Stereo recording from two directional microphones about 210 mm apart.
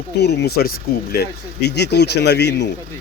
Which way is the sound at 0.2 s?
50° left (ahead or behind).